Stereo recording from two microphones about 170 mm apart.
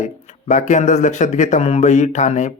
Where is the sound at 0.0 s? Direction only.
45° left (ahead or behind).